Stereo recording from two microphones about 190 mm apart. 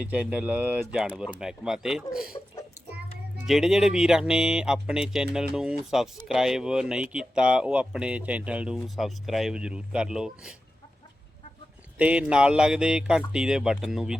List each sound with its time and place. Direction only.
0.0 s speech: 5° right (ahead or behind)
2.3 s speech: 25° left (ahead or behind)
3.3 s speech: centre (ahead or behind)
11.9 s speech: 5° right (ahead or behind)